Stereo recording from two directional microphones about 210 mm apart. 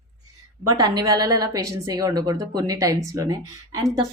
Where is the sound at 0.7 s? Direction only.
15° right (ahead or behind).